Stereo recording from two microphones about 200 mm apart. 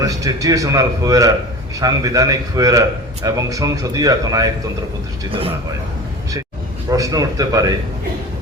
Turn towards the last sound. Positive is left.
turn(degrees=-20)  # may be behind; listen again after turning